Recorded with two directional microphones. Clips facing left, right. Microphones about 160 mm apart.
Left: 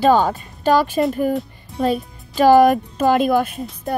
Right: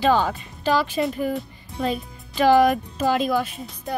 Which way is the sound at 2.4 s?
45° left (ahead or behind).